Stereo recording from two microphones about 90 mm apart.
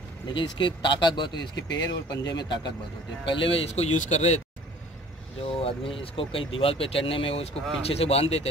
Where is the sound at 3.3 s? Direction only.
70° left (ahead or behind).